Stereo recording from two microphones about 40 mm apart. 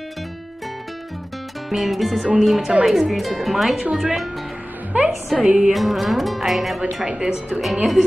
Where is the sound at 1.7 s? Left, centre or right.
Centre.